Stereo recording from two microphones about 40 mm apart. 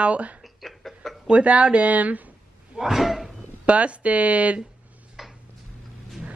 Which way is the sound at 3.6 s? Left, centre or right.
Right.